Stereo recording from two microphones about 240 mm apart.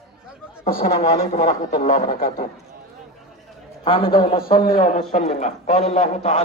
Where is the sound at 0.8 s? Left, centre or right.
Left.